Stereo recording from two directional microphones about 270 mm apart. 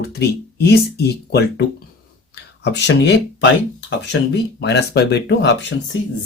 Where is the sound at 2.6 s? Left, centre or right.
Left.